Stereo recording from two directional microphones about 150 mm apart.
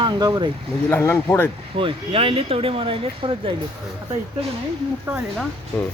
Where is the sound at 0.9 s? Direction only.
15° left (ahead or behind).